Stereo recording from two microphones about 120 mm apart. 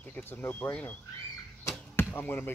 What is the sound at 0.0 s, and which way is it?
Speech, 15° left (ahead or behind).